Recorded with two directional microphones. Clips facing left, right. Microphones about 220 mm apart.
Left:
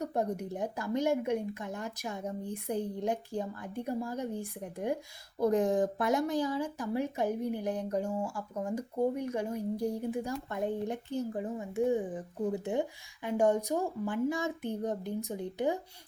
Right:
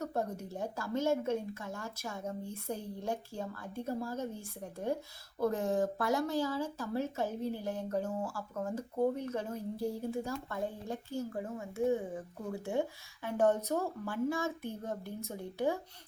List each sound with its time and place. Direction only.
0.0 s speech: 15° left (ahead or behind)